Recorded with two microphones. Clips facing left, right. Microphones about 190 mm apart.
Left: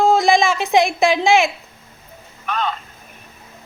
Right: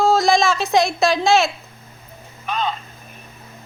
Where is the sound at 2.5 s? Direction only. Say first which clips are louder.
Even; 15° right (ahead or behind).